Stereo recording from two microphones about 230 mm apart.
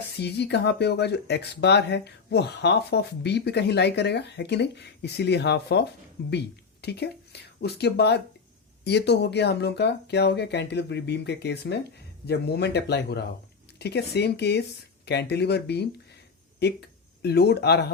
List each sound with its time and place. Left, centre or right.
0.2 s speech: left